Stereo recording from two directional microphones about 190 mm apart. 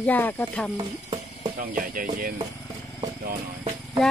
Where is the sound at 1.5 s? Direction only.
45° right (ahead or behind).